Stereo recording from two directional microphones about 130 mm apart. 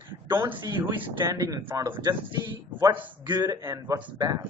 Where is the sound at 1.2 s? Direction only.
25° right (ahead or behind).